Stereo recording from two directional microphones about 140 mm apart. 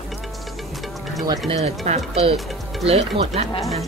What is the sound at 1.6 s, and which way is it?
Speech, 50° right (ahead or behind).